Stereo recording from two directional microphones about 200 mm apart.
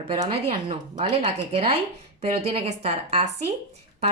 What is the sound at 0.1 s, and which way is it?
A woman's voice, 25° right (ahead or behind).